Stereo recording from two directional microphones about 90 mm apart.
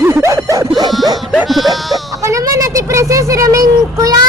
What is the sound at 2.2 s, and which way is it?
A child's voice, 40° right (ahead or behind).